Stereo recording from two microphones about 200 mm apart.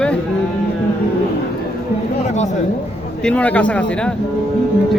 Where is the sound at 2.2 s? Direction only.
35° left (ahead or behind).